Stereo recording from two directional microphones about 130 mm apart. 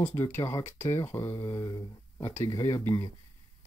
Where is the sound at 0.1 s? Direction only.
25° left (ahead or behind).